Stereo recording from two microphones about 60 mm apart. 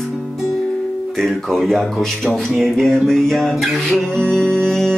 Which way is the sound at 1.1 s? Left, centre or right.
Centre.